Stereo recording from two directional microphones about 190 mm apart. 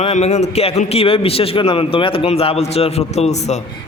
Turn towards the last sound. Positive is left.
turn(degrees=35)  # may be behind; listen again after turning